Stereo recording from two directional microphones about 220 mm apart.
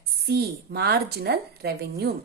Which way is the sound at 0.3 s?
50° right (ahead or behind).